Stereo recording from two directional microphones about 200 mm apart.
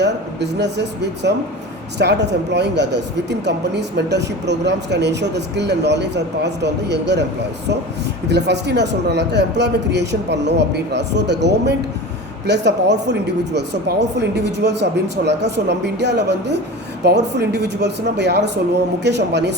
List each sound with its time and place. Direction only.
0.0 s speech: 60° right (ahead or behind)
8.3 s speech: 55° right (ahead or behind)